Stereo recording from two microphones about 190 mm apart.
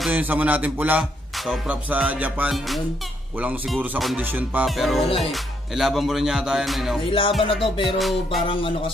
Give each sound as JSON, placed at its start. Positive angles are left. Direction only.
{"t": 0.0, "sound": "music", "side_deg": -10}
{"t": 7.1, "sound": "speech", "side_deg": 25}
{"t": 7.8, "sound": "music", "side_deg": 0}
{"t": 8.5, "sound": "speech", "side_deg": 25}